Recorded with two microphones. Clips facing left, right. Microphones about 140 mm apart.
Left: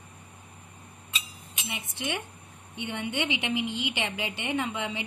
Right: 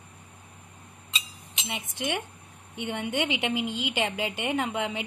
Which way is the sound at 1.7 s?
50° right (ahead or behind).